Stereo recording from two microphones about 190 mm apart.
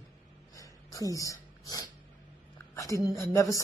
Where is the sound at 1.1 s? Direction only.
15° left (ahead or behind).